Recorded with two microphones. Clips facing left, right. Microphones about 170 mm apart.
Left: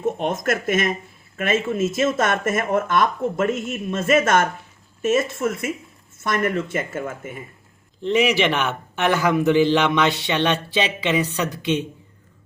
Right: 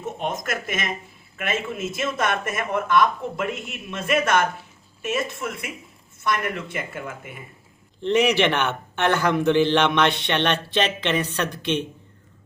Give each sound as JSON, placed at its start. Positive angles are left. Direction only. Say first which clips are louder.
{"t": 0.0, "sound": "a sound", "louder": "left 5 dB", "side_deg": 50}
{"t": 0.4, "sound": "speech", "louder": "left 7 dB", "side_deg": 50}
{"t": 8.0, "sound": "a man's voice", "louder": "even", "side_deg": 5}